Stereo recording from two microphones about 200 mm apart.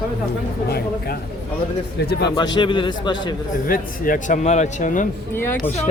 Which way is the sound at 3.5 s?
45° left (ahead or behind).